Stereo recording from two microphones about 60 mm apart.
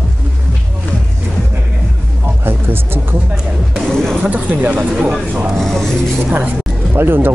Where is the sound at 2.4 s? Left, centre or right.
Right.